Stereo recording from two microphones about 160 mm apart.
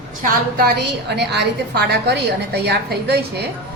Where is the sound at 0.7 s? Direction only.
90° right.